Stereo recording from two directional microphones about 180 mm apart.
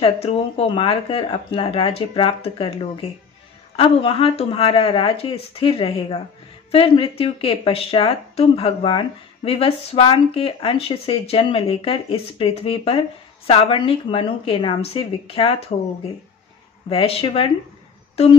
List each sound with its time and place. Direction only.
0.0 s speech: 35° left (ahead or behind)
16.9 s speech: 30° left (ahead or behind)